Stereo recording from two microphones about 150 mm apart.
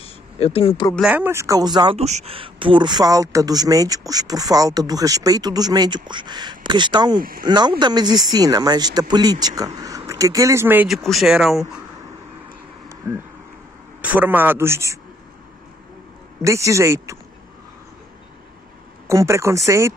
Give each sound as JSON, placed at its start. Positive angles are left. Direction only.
{"t": 0.0, "sound": "a sound", "side_deg": 40}
{"t": 1.0, "sound": "speech", "side_deg": -10}
{"t": 2.0, "sound": "speech", "side_deg": -45}
{"t": 7.2, "sound": "speech", "side_deg": -75}
{"t": 7.4, "sound": "speech", "side_deg": -30}
{"t": 10.9, "sound": "speech", "side_deg": 0}
{"t": 13.0, "sound": "a man's voice", "side_deg": -15}
{"t": 16.4, "sound": "speech", "side_deg": -20}
{"t": 19.0, "sound": "speech", "side_deg": -20}